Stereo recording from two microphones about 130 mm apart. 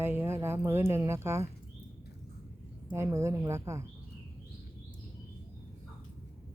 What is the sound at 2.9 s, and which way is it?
Speech, 20° right (ahead or behind).